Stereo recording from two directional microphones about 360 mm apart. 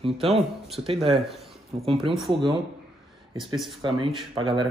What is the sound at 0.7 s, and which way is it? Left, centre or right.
Speech, centre.